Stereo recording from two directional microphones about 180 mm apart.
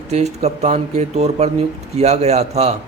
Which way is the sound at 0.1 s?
35° right (ahead or behind).